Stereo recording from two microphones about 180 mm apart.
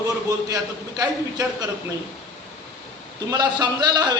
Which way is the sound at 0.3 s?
20° right (ahead or behind).